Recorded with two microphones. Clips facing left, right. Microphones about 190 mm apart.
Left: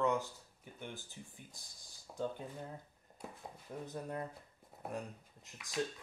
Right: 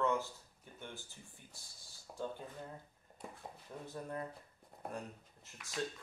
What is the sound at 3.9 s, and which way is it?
Speech, 20° left (ahead or behind).